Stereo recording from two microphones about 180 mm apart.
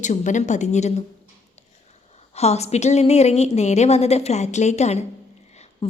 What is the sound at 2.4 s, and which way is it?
A woman's voice, 35° left (ahead or behind).